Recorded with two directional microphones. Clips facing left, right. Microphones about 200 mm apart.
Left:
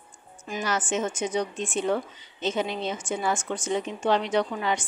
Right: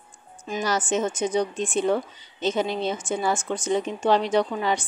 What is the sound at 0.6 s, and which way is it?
A woman's voice, 35° right (ahead or behind).